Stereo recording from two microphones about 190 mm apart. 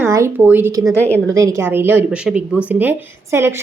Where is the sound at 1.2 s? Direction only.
15° right (ahead or behind).